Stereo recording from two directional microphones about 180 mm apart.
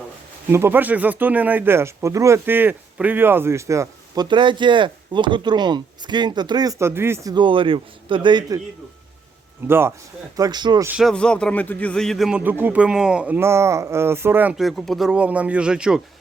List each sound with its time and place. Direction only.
0.5 s speech: 10° right (ahead or behind)
7.3 s a man's voice: 30° right (ahead or behind)
9.6 s a man's voice: 10° right (ahead or behind)
10.8 s speech: 5° right (ahead or behind)
11.1 s speech: 5° left (ahead or behind)